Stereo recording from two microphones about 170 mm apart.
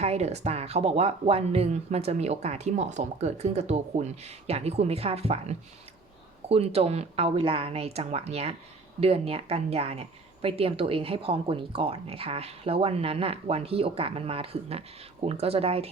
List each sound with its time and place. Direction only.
0.0 s a woman's voice: 40° right (ahead or behind)